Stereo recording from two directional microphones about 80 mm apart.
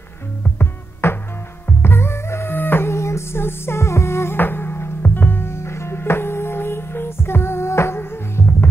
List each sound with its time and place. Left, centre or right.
1.0 s music: left